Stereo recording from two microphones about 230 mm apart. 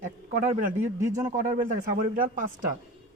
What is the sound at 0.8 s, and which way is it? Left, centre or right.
Speech, centre.